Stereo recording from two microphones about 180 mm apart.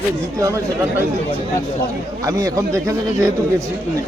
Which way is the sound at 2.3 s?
20° right (ahead or behind).